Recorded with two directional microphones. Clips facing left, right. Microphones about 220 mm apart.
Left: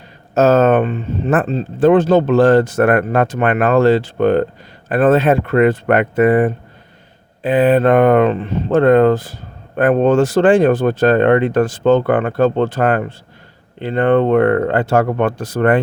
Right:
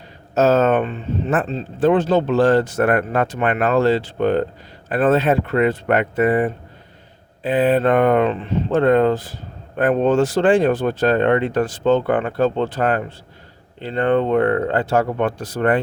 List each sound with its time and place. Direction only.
0.3 s speech: 50° left (ahead or behind)